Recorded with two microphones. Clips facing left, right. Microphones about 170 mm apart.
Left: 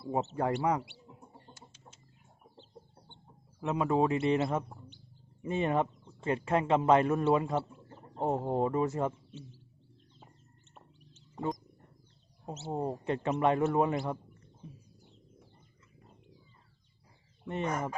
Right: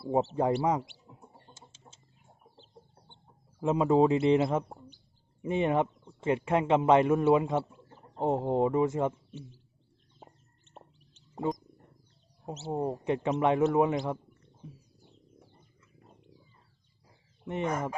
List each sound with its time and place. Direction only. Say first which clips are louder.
0.0 s speech: right 5 dB; 30° right (ahead or behind)
0.6 s speech: right 2 dB; 20° right (ahead or behind)
1.5 s chicken: even; 25° right (ahead or behind)
3.6 s a man's voice: right 5 dB; 25° right (ahead or behind)
11.1 s a sound: right 3 dB; 15° right (ahead or behind)
12.5 s a man's voice: right 3 dB; 15° right (ahead or behind)
17.4 s speech: right 2 dB; 15° right (ahead or behind)